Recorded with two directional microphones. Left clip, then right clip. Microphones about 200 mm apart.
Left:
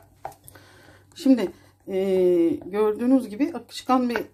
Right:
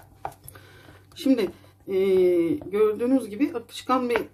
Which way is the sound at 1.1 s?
35° left (ahead or behind).